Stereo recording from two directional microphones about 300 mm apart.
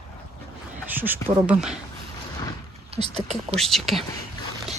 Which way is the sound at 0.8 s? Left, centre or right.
Centre.